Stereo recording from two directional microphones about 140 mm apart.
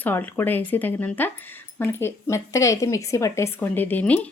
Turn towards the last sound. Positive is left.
turn(degrees=10)  # may be behind; listen again after turning